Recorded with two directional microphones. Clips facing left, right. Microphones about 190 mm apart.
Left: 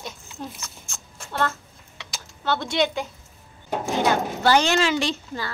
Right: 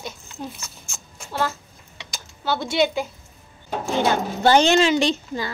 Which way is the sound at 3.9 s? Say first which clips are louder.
Right 1 dB; 25° right (ahead or behind).